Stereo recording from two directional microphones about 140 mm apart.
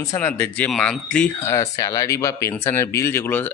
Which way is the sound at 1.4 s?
20° left (ahead or behind).